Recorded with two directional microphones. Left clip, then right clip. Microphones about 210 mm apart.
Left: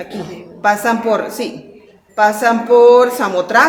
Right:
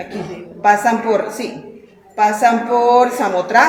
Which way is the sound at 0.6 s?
35° left (ahead or behind).